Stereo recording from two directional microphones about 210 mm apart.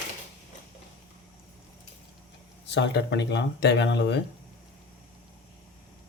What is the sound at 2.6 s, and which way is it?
Speech, 55° left (ahead or behind).